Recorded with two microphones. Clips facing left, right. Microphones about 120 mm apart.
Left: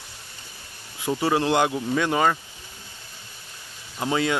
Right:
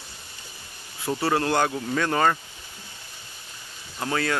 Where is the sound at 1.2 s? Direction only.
15° left (ahead or behind).